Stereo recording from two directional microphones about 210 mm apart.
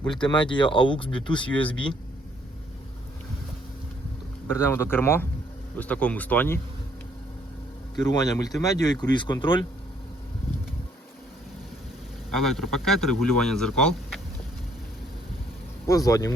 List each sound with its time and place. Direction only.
0.1 s speech: 20° left (ahead or behind)
1.3 s speech: 5° left (ahead or behind)
4.4 s speech: 10° left (ahead or behind)
7.9 s speech: 15° left (ahead or behind)
12.3 s speech: centre (ahead or behind)
15.9 s speech: 15° left (ahead or behind)